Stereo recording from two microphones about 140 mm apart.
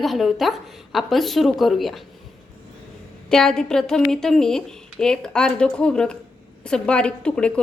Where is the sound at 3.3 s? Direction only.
5° left (ahead or behind).